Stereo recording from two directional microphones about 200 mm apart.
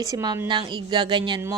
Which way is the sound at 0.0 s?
20° right (ahead or behind).